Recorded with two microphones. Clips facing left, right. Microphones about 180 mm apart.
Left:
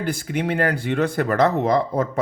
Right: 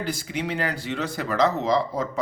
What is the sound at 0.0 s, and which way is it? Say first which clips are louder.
Speech: left 4 dB; 55° left (ahead or behind).